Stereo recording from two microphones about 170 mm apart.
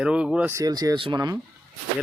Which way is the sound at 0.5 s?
20° right (ahead or behind).